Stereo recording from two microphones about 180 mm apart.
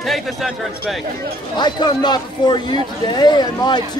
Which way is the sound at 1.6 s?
25° left (ahead or behind).